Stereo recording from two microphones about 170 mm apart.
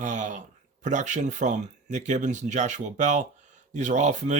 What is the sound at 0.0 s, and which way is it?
Speech, 45° right (ahead or behind).